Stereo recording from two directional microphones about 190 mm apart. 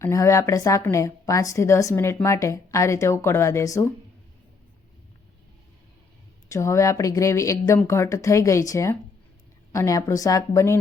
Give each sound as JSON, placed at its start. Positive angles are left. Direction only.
{"t": 0.0, "sound": "a woman's voice", "side_deg": 15}
{"t": 6.5, "sound": "a woman's voice", "side_deg": 15}